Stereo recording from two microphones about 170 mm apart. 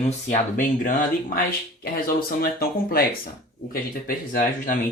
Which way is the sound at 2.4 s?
60° left (ahead or behind).